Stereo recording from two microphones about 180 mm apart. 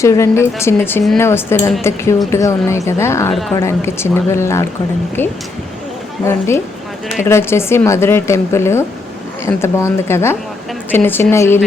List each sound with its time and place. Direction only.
0.0 s a woman's voice: 15° left (ahead or behind)
7.3 s a woman's voice: 15° left (ahead or behind)